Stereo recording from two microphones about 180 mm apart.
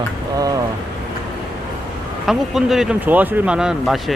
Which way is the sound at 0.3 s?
20° right (ahead or behind).